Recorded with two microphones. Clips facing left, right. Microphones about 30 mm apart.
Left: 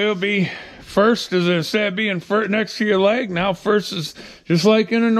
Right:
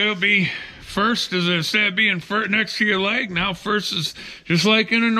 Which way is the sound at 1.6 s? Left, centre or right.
Right.